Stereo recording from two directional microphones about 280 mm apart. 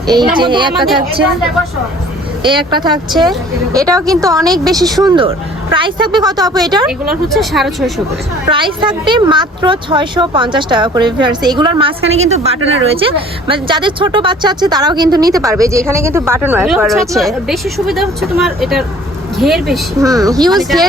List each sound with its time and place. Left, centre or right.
0.0 s a woman's voice: centre
2.4 s a woman's voice: centre
6.8 s speech: centre
8.4 s a woman's voice: centre
20.0 s a woman's voice: centre
20.5 s speech: centre